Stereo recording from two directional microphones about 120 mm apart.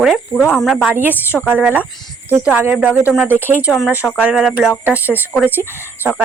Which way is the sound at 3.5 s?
20° left (ahead or behind).